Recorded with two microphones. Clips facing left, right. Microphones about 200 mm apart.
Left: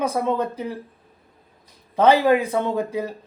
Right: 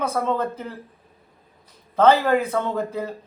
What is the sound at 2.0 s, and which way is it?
Speech, 15° left (ahead or behind).